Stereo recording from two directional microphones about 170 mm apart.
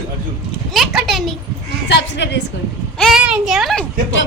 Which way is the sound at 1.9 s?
90° left.